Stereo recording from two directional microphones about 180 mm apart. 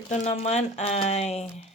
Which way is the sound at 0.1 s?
40° left (ahead or behind).